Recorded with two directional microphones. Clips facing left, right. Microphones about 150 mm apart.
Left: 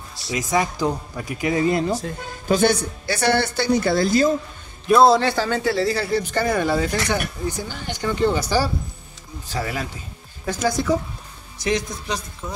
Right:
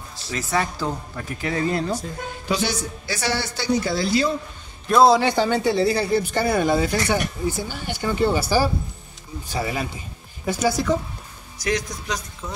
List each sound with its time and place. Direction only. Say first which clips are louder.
0.3 s speech: left 3 dB; 15° left (ahead or behind)
2.4 s a woman's voice: left 7 dB; 50° left (ahead or behind)
4.8 s a man's voice: left 1 dB; centre (ahead or behind)
5.2 s speech: right 1 dB; 15° right (ahead or behind)
11.6 s a man's voice: left 2 dB; 25° left (ahead or behind)